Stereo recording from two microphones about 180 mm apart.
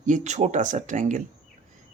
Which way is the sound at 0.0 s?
40° right (ahead or behind).